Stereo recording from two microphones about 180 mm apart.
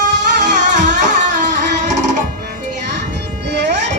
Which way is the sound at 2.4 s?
70° right (ahead or behind).